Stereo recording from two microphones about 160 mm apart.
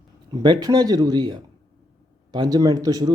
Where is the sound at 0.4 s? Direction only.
25° right (ahead or behind).